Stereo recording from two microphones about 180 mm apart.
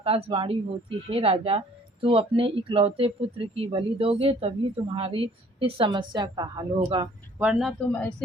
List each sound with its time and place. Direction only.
0.0 s a woman's voice: 30° right (ahead or behind)
7.3 s speech: 10° right (ahead or behind)
7.7 s speech: 5° left (ahead or behind)